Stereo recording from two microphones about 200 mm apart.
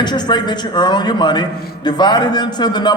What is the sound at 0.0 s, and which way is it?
A man's voice, 20° left (ahead or behind).